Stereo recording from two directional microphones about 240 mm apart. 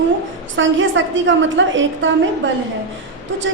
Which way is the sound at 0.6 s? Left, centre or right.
Right.